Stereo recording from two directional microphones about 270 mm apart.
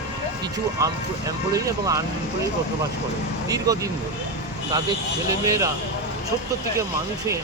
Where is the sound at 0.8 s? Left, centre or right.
Centre.